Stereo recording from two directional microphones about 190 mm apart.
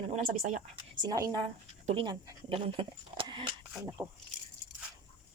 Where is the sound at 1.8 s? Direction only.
25° right (ahead or behind).